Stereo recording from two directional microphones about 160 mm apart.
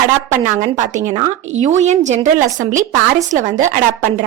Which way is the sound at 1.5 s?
45° right (ahead or behind).